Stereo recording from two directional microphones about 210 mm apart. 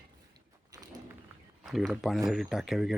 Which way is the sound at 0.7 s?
15° right (ahead or behind).